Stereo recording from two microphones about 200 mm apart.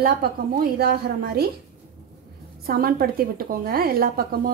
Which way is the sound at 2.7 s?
50° right (ahead or behind).